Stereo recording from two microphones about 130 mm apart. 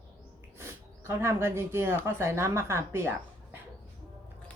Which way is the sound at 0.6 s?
20° right (ahead or behind).